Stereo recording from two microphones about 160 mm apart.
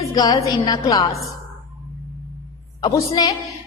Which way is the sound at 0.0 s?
25° left (ahead or behind).